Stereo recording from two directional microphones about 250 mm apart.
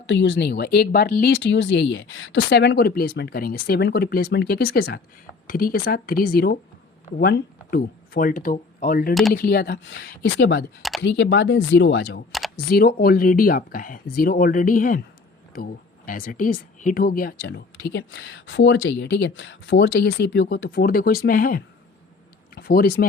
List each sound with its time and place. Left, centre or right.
0.0 s speech: left
2.5 s speech: left